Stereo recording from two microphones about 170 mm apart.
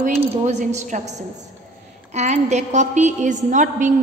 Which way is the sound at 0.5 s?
40° right (ahead or behind).